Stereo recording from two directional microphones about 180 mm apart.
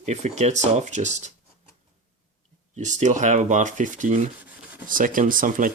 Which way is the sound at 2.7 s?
40° right (ahead or behind).